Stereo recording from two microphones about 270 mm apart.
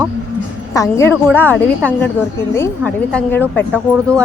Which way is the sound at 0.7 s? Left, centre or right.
Centre.